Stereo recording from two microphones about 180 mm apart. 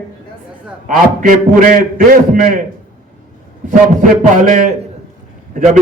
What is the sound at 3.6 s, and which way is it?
Speech, 50° right (ahead or behind).